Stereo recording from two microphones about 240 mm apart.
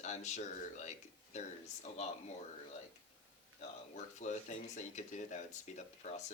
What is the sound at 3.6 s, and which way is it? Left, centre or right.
Speech, left.